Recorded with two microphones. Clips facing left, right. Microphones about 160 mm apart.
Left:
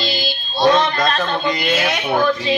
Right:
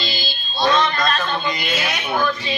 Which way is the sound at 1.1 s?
65° left (ahead or behind).